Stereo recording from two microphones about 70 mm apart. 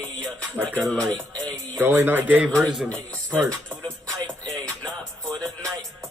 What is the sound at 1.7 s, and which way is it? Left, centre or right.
Mantra, right.